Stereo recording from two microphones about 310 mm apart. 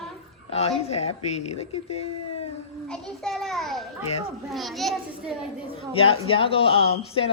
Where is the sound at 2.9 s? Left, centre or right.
Centre.